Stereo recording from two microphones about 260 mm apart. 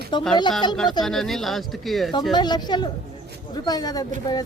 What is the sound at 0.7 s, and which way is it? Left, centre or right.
Speech, centre.